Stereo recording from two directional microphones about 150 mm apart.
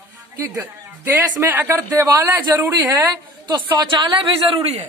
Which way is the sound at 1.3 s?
20° right (ahead or behind).